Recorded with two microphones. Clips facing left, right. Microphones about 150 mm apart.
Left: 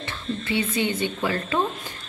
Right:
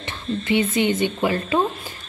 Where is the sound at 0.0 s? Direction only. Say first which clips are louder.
Right 3 dB; 20° right (ahead or behind).